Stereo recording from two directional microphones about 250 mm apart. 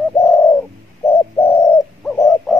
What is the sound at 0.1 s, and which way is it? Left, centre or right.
Bird, centre.